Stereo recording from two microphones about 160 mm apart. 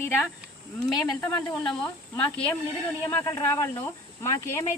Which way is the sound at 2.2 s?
10° left (ahead or behind).